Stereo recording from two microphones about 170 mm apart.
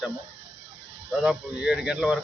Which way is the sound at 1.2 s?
5° right (ahead or behind).